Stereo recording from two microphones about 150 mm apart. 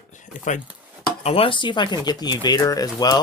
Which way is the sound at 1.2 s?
40° left (ahead or behind).